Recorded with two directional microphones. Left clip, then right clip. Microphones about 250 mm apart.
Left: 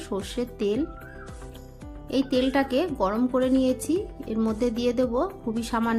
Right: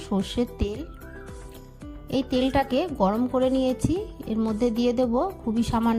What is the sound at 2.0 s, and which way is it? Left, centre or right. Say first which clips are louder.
Speech: left 1 dB; right.